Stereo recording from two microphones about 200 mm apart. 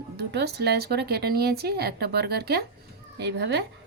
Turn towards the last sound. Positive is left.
turn(degrees=-55)  # may be behind; listen again after turning